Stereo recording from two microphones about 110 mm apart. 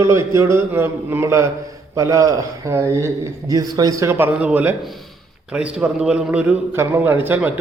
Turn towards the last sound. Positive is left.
turn(degrees=-15)  # may be behind; listen again after turning